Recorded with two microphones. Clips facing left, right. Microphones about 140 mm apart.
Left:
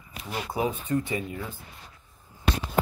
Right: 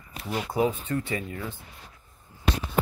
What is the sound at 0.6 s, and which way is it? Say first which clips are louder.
Speech: right 1 dB; 20° left (ahead or behind).